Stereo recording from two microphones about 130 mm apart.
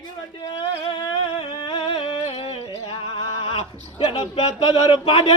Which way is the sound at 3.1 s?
45° left (ahead or behind).